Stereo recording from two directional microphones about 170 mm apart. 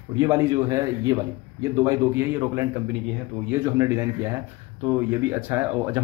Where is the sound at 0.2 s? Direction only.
20° right (ahead or behind).